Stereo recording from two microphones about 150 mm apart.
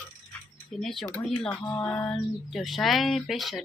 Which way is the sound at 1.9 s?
10° left (ahead or behind).